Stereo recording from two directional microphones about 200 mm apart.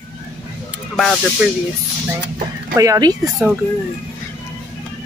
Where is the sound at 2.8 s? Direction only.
20° right (ahead or behind).